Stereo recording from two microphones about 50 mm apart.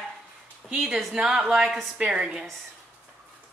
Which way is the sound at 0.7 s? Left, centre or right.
Right.